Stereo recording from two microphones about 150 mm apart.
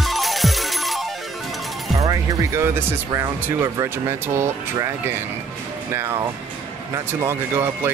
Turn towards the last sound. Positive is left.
turn(degrees=-15)  # may be behind; listen again after turning